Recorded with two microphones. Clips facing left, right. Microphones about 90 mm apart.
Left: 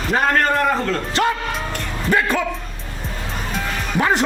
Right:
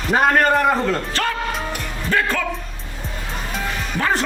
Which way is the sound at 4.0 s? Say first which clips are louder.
Left 3 dB; 15° left (ahead or behind).